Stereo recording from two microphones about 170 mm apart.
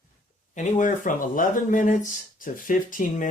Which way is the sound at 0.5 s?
45° left (ahead or behind).